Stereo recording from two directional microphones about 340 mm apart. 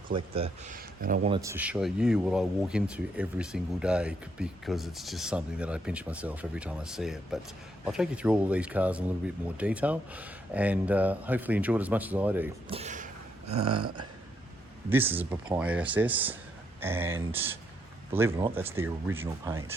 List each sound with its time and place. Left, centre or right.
0.1 s speech: centre
12.7 s speech: centre
14.8 s speech: centre